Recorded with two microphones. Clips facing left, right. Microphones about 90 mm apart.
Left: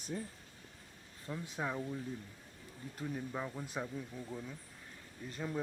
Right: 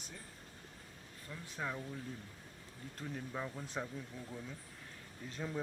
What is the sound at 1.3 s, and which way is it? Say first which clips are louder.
Speech: left 3 dB; 20° left (ahead or behind).